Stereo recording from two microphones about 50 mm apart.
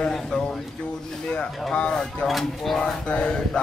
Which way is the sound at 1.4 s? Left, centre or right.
Left.